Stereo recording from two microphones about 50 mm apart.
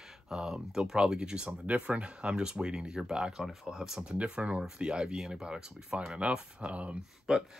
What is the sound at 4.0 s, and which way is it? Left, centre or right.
Speech, right.